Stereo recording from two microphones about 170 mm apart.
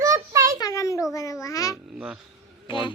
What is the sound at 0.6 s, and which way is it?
A child's voice, 20° left (ahead or behind).